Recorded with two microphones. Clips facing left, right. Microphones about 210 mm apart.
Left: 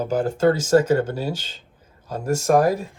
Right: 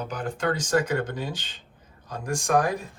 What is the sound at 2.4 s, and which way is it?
Speech, 40° left (ahead or behind).